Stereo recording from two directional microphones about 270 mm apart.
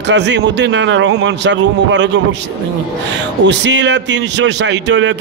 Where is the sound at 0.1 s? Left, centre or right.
Right.